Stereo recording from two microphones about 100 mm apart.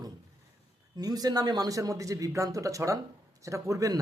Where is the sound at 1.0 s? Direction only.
40° right (ahead or behind).